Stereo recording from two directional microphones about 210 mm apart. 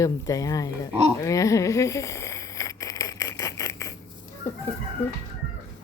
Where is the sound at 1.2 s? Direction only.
15° left (ahead or behind).